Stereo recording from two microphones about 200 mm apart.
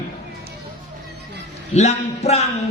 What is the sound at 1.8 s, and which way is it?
Speech, 30° left (ahead or behind).